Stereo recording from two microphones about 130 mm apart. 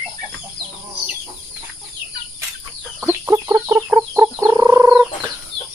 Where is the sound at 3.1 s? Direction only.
20° right (ahead or behind).